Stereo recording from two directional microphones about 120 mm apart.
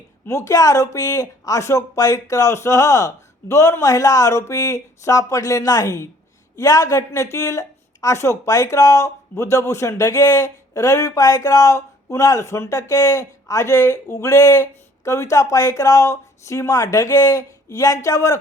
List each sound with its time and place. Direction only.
0.3 s speech: 25° left (ahead or behind)